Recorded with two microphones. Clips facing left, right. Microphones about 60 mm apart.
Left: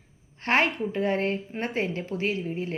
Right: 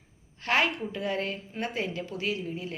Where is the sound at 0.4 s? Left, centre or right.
Left.